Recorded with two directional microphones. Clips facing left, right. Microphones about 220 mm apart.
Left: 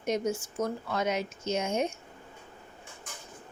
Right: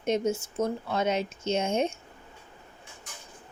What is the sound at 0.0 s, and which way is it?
A woman's voice, 25° right (ahead or behind).